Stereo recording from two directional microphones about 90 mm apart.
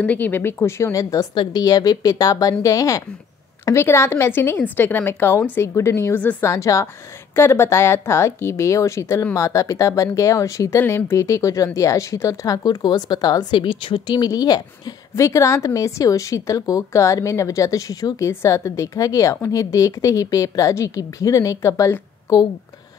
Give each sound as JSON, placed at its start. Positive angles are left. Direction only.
{"t": 0.0, "sound": "a woman's voice", "side_deg": 20}
{"t": 1.3, "sound": "speech", "side_deg": 60}
{"t": 1.6, "sound": "a woman's voice", "side_deg": 45}
{"t": 10.8, "sound": "speech", "side_deg": 25}